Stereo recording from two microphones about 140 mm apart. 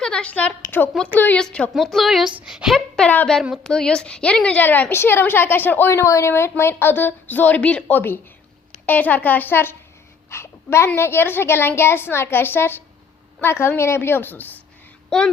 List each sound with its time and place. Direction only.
0.0 s a woman's voice: 5° left (ahead or behind)